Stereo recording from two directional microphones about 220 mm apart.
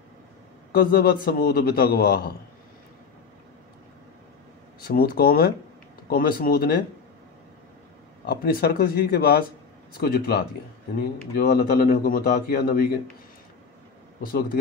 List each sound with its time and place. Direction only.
0.7 s speech: 45° left (ahead or behind)
4.8 s speech: 45° left (ahead or behind)
8.3 s speech: 45° left (ahead or behind)
14.2 s speech: 40° left (ahead or behind)